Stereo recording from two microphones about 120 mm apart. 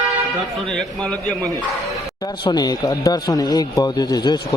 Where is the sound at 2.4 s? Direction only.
35° left (ahead or behind).